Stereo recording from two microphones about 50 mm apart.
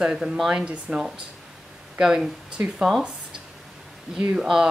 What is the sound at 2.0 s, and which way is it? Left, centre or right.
Speech, centre.